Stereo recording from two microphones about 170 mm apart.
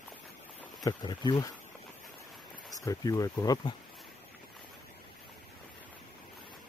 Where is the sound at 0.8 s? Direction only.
25° left (ahead or behind).